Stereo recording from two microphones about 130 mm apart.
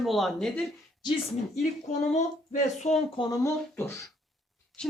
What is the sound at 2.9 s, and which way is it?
Speech, 60° left (ahead or behind).